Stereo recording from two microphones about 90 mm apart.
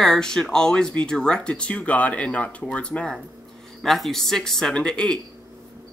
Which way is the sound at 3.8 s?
5° left (ahead or behind).